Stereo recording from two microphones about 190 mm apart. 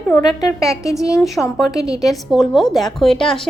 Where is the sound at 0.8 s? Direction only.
15° left (ahead or behind).